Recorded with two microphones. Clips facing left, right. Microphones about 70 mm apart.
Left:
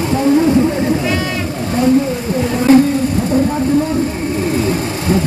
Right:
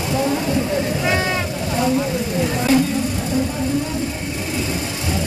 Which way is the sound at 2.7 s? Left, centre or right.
Left.